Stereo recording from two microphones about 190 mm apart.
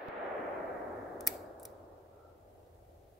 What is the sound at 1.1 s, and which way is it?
Scissors, centre (ahead or behind).